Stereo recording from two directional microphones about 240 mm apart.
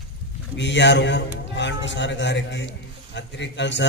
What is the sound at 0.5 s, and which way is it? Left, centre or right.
A man's voice, left.